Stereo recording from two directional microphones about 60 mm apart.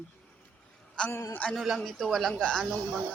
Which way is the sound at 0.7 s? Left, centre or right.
Centre.